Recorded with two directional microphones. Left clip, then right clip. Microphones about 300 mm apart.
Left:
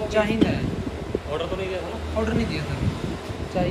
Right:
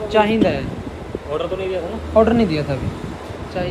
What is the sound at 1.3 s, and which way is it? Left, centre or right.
Speech, centre.